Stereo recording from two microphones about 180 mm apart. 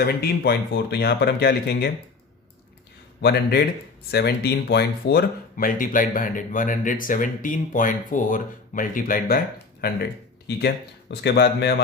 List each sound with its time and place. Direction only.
0.0 s speech: 60° left (ahead or behind)
3.2 s speech: 65° left (ahead or behind)
11.1 s speech: 65° left (ahead or behind)